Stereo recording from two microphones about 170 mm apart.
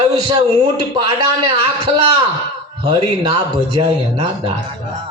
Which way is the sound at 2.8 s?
25° right (ahead or behind).